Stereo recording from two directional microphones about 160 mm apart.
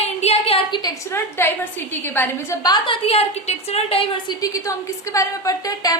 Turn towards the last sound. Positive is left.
turn(degrees=25)  # may be behind; listen again after turning